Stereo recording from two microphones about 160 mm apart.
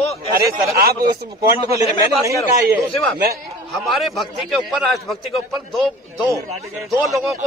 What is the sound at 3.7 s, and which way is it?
Speech, centre (ahead or behind).